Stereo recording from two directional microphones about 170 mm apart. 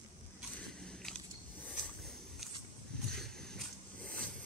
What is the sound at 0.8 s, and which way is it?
Biting, 5° left (ahead or behind).